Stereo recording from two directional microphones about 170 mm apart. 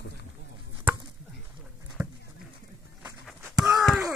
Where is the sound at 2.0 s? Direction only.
5° right (ahead or behind).